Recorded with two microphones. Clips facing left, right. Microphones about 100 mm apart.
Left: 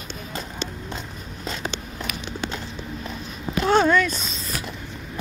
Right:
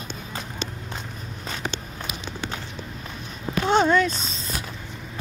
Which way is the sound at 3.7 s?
25° right (ahead or behind).